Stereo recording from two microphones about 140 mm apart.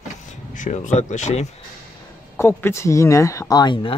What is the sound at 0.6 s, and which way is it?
Speech, 55° left (ahead or behind).